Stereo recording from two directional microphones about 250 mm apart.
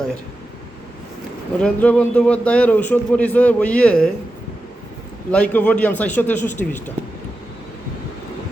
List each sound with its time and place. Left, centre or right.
1.5 s a man's voice: centre
5.3 s a man's voice: centre